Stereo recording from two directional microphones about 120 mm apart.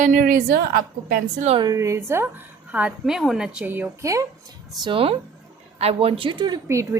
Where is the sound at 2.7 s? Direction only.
10° right (ahead or behind).